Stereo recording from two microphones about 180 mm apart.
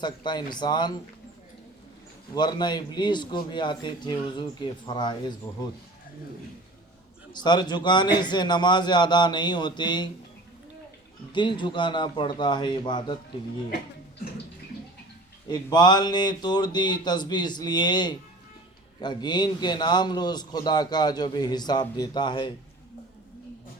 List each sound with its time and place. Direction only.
0.0 s a man's voice: 25° left (ahead or behind)
2.3 s a man's voice: 25° left (ahead or behind)
7.3 s a man's voice: 25° left (ahead or behind)
11.3 s a man's voice: 25° left (ahead or behind)
15.4 s a man's voice: 25° left (ahead or behind)